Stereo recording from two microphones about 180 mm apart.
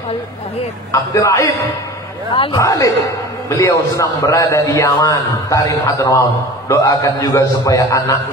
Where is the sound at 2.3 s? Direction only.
30° left (ahead or behind).